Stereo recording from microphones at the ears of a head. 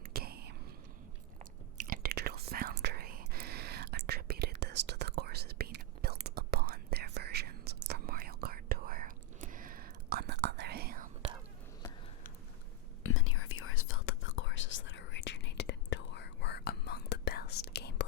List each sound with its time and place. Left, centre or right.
0.1 s whispering: right
1.8 s whispering: right
13.0 s whispering: left